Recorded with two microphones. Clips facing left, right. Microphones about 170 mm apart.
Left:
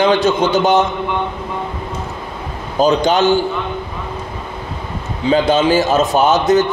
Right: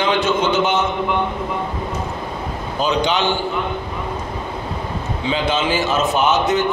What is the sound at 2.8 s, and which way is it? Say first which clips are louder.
Speech: left 6 dB; 40° left (ahead or behind).